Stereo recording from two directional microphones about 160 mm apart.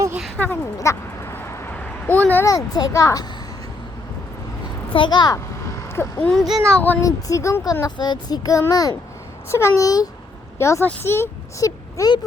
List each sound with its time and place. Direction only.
0.3 s speech: 10° left (ahead or behind)
4.9 s speech: 30° left (ahead or behind)
5.9 s speech: 10° left (ahead or behind)